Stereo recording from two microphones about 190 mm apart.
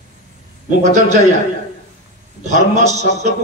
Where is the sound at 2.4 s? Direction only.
40° right (ahead or behind).